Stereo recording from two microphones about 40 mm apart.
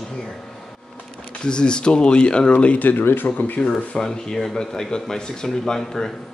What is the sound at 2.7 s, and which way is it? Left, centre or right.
Speech, left.